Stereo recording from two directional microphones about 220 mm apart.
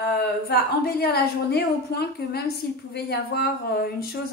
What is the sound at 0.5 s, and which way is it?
A woman's voice, 45° left (ahead or behind).